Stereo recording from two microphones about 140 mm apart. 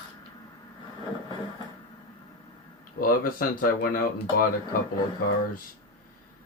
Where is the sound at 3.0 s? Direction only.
90° left.